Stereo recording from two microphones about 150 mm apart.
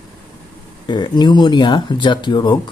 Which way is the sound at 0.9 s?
30° left (ahead or behind).